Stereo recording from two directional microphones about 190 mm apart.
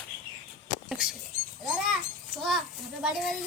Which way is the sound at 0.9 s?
5° right (ahead or behind).